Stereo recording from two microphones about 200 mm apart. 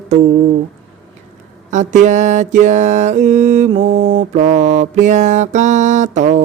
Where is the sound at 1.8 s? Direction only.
35° right (ahead or behind).